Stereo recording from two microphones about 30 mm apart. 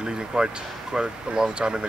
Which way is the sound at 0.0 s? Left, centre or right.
Right.